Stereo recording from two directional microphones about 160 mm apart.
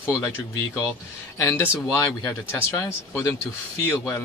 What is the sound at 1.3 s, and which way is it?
Speech, 20° left (ahead or behind).